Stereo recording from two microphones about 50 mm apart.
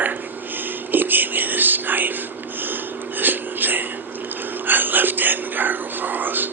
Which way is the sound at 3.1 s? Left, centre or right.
Right.